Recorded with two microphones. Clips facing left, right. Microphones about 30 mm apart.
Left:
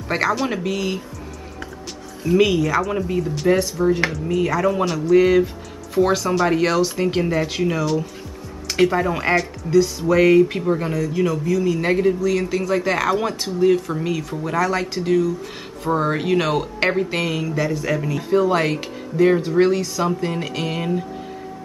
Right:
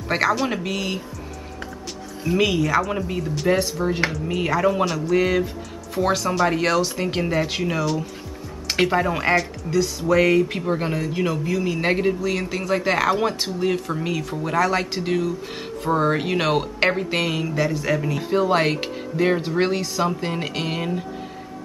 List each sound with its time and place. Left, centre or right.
0.1 s speech: centre
2.2 s speech: centre
10.7 s a man's voice: right